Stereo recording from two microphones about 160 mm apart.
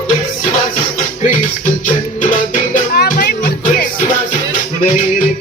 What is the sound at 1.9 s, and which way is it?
Music, 55° left (ahead or behind).